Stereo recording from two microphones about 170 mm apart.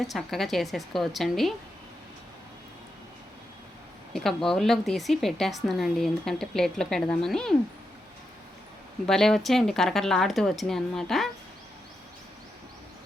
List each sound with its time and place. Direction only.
0.0 s a woman's voice: centre (ahead or behind)
4.1 s a woman's voice: 5° left (ahead or behind)
9.0 s a woman's voice: centre (ahead or behind)